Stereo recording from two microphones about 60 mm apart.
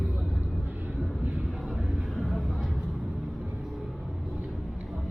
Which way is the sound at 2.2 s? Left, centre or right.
Centre.